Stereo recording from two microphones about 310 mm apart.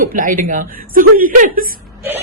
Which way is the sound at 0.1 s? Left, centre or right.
Right.